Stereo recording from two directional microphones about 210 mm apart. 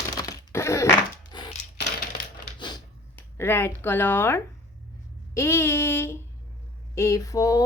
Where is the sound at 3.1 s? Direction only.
10° left (ahead or behind).